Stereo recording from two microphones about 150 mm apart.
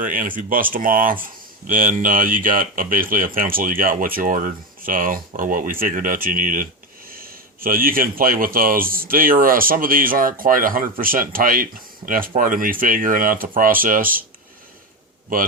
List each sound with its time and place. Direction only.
0.0 s speech: 65° right (ahead or behind)